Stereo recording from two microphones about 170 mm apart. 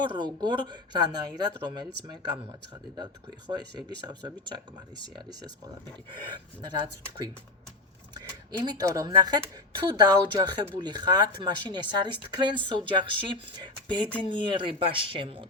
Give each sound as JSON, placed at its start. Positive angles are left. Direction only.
{"t": 0.0, "sound": "speech", "side_deg": -25}
{"t": 2.9, "sound": "speech", "side_deg": -25}
{"t": 8.1, "sound": "speech", "side_deg": -25}